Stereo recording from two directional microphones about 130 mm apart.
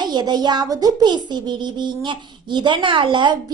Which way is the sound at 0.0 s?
35° right (ahead or behind).